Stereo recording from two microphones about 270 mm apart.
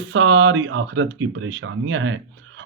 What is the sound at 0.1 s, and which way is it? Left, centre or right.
Speech, right.